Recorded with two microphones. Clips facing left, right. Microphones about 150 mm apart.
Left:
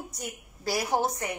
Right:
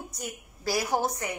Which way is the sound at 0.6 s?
20° left (ahead or behind).